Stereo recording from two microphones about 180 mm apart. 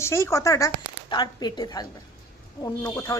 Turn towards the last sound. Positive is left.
turn(degrees=15)  # may be behind; listen again after turning